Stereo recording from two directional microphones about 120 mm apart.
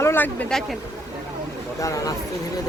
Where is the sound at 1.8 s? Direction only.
30° left (ahead or behind).